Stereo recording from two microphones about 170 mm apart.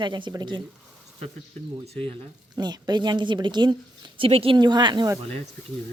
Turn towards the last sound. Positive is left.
turn(degrees=-25)  # may be behind; listen again after turning